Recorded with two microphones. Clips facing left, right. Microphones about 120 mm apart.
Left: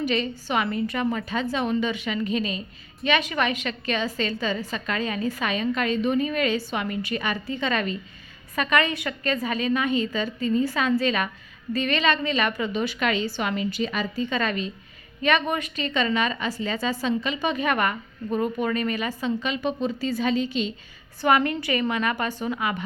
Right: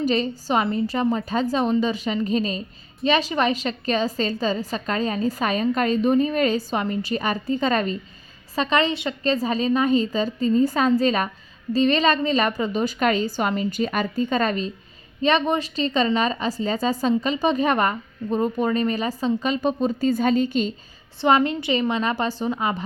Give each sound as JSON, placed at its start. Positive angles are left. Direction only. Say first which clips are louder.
{"t": 0.0, "sound": "a woman's voice", "louder": "right 3 dB", "side_deg": -35}
{"t": 21.2, "sound": "a woman's voice", "louder": "right 2 dB", "side_deg": -25}